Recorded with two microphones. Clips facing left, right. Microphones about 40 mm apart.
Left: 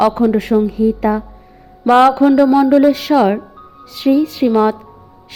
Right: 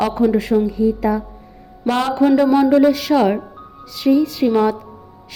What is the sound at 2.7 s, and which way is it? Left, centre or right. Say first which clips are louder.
A woman's voice: left 3 dB; left.